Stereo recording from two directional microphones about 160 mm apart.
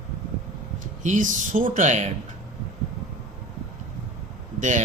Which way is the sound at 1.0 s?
55° right (ahead or behind).